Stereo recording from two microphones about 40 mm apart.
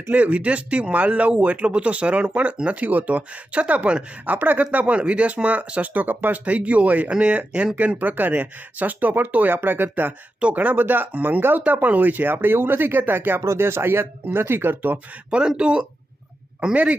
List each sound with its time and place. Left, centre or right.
0.1 s speech: right
4.9 s speech: right
6.4 s speech: right
10.5 s speech: right
11.6 s speech: right
15.3 s speech: right